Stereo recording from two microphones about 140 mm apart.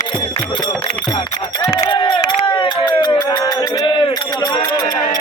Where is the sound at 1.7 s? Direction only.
30° left (ahead or behind).